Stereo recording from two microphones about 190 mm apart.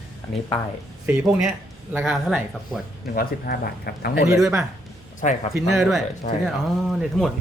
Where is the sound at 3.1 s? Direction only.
55° left (ahead or behind).